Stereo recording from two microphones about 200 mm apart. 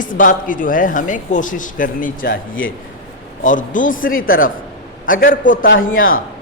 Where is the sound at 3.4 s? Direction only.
40° left (ahead or behind).